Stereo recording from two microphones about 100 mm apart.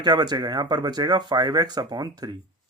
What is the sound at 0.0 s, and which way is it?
A man's voice, 45° right (ahead or behind).